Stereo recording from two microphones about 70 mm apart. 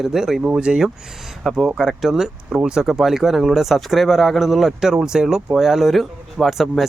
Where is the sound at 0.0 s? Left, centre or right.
Centre.